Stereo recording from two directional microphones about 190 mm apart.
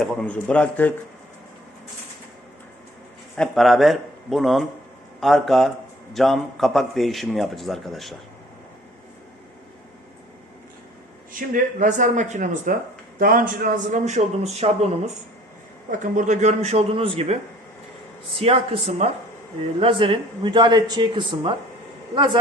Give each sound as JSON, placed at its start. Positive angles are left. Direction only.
{"t": 0.0, "sound": "a man's voice", "side_deg": 5}
{"t": 3.3, "sound": "a man's voice", "side_deg": 5}
{"t": 11.3, "sound": "a man's voice", "side_deg": -45}
{"t": 18.3, "sound": "a man's voice", "side_deg": -30}